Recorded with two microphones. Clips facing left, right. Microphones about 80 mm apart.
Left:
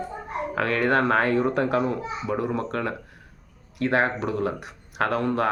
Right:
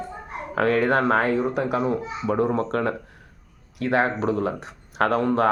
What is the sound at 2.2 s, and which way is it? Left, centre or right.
Speech, right.